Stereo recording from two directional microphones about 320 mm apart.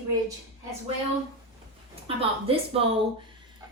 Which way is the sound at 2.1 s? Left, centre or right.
Centre.